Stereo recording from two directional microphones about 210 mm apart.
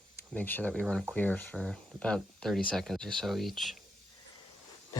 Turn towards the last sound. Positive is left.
turn(degrees=0)  # may be behind; listen again after turning